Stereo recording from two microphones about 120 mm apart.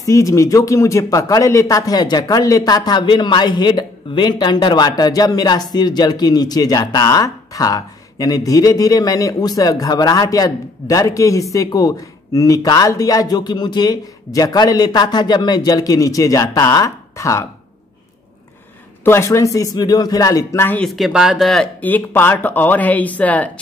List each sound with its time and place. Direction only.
0.0 s speech: 25° left (ahead or behind)
19.0 s speech: 25° left (ahead or behind)
20.8 s speech: centre (ahead or behind)
21.8 s speech: 15° left (ahead or behind)